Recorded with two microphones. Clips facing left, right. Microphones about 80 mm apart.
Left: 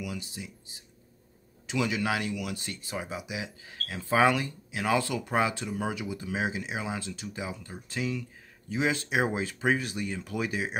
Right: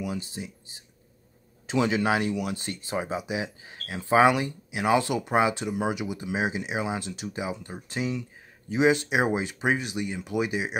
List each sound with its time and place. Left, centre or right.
0.0 s speech: right; by 10.8 s centre